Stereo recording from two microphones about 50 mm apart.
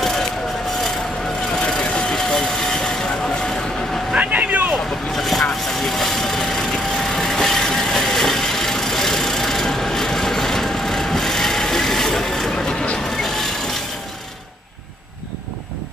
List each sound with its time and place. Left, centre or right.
1.7 s vehicle: centre
4.1 s vehicle: right
5.1 s vehicle: centre